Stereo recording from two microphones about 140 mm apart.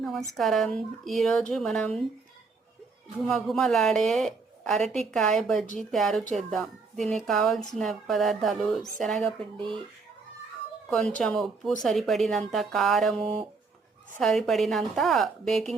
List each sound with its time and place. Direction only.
0.3 s a woman's voice: centre (ahead or behind)
3.2 s a woman's voice: 5° left (ahead or behind)
9.4 s speech: 40° right (ahead or behind)
10.8 s a woman's voice: 5° left (ahead or behind)